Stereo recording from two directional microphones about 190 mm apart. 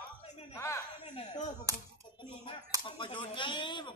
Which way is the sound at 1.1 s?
35° left (ahead or behind).